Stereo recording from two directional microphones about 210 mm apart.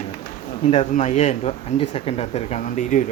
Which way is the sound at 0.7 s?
30° left (ahead or behind).